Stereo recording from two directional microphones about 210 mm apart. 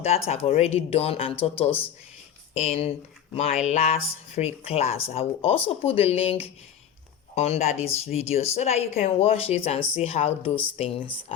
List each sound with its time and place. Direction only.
0.3 s a woman's voice: 30° left (ahead or behind)